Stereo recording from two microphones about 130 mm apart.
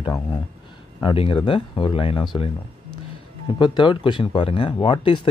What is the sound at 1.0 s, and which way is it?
A man's voice, 45° left (ahead or behind).